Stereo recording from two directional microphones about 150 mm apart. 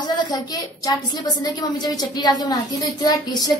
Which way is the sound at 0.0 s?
30° left (ahead or behind).